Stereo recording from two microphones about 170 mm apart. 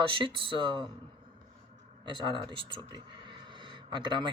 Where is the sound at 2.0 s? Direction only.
30° right (ahead or behind).